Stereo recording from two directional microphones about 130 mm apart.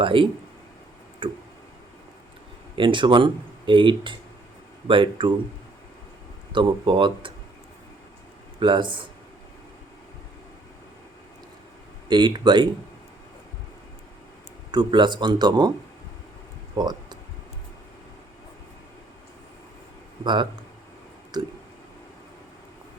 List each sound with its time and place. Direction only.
0.0 s speech: 45° right (ahead or behind)
2.7 s speech: 40° right (ahead or behind)
6.5 s speech: 40° right (ahead or behind)
8.5 s speech: 40° right (ahead or behind)
12.0 s speech: 35° right (ahead or behind)
14.7 s speech: 35° right (ahead or behind)
16.7 s a sound: 35° right (ahead or behind)
20.2 s speech: 35° right (ahead or behind)